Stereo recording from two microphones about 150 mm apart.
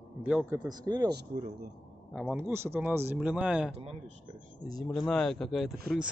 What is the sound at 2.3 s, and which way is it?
Speech, 15° right (ahead or behind).